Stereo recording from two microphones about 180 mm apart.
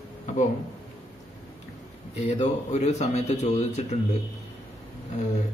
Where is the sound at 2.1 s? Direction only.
40° left (ahead or behind).